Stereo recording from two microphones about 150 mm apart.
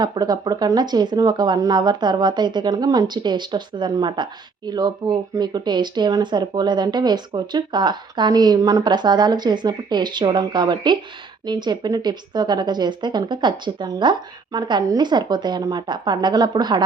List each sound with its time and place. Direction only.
0.0 s speech: 30° right (ahead or behind)